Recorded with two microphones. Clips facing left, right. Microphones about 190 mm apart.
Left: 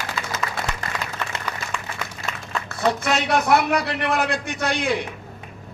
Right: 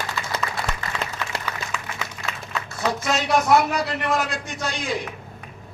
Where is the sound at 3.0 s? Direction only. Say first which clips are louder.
Even; 60° left (ahead or behind).